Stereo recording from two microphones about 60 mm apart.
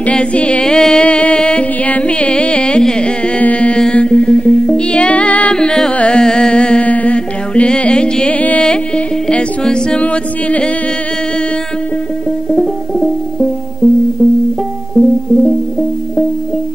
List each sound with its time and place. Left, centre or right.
0.0 s music: centre
5.6 s music: centre
12.4 s music: centre